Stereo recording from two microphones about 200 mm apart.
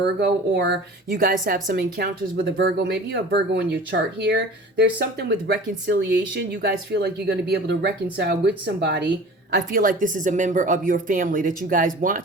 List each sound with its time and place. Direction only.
0.2 s a woman's voice: 55° right (ahead or behind)
9.5 s speech: 45° right (ahead or behind)